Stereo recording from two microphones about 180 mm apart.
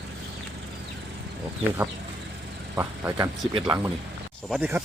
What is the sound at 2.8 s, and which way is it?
Speech, 15° right (ahead or behind).